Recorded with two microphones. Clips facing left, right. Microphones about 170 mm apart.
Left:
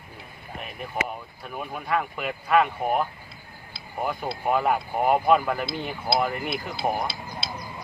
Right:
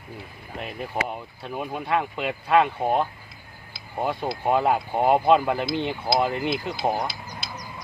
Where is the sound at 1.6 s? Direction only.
25° right (ahead or behind).